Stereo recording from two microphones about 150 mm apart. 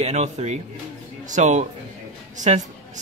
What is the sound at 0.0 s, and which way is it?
A man's voice, 45° right (ahead or behind).